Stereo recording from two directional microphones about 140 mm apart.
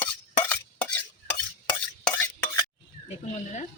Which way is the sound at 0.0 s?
10° left (ahead or behind).